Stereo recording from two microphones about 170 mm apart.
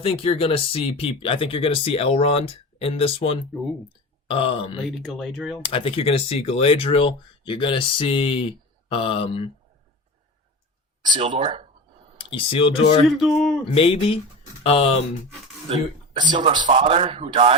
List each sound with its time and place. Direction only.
0.0 s speech: 35° left (ahead or behind)
5.0 s speech: centre (ahead or behind)
5.6 s speech: 35° left (ahead or behind)
11.2 s a man's voice: 35° right (ahead or behind)
12.1 s speech: 35° left (ahead or behind)
13.1 s speech: centre (ahead or behind)
13.7 s speech: 35° left (ahead or behind)
16.1 s a man's voice: 25° right (ahead or behind)